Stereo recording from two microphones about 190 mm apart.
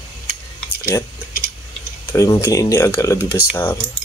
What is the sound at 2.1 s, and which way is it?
Speech, 15° left (ahead or behind).